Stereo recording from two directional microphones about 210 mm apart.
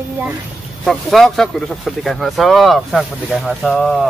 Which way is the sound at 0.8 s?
Centre (ahead or behind).